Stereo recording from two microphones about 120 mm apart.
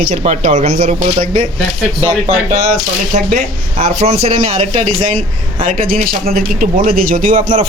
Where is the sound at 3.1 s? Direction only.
85° right.